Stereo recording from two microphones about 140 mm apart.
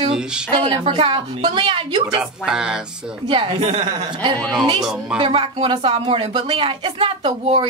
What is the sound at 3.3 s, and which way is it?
Speech, 45° right (ahead or behind).